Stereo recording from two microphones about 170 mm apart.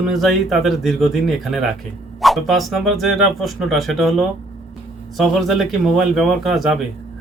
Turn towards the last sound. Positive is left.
turn(degrees=0)  # may be behind; listen again after turning